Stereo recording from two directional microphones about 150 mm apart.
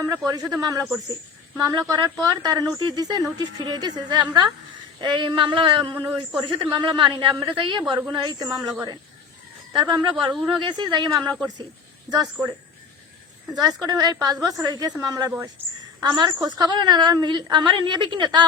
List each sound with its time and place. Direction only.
0.5 s speech: 25° right (ahead or behind)
9.7 s speech: 30° right (ahead or behind)
13.5 s speech: 25° right (ahead or behind)
15.3 s speech: 15° right (ahead or behind)
16.0 s speech: 25° right (ahead or behind)